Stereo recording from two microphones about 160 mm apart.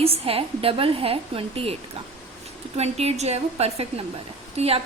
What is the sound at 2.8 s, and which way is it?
A woman's voice, 40° right (ahead or behind).